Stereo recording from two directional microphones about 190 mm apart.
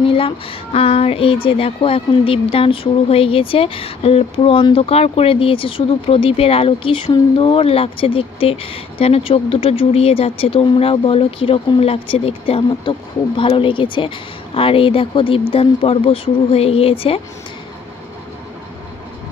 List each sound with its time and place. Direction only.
0.0 s music: 30° left (ahead or behind)
0.7 s speech: 30° left (ahead or behind)